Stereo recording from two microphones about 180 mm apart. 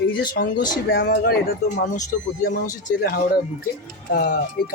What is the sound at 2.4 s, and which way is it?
Speech, 55° left (ahead or behind).